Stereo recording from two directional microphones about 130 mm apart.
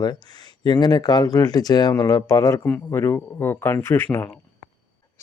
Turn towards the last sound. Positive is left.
turn(degrees=15)  # may be behind; listen again after turning